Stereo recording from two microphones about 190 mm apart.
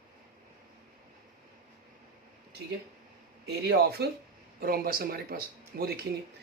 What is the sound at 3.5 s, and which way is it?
Speech, 60° right (ahead or behind).